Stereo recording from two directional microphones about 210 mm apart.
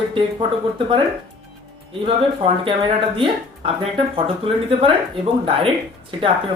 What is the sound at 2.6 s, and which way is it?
Speech, 25° right (ahead or behind).